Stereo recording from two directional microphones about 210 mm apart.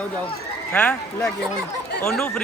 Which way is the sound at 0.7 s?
5° left (ahead or behind).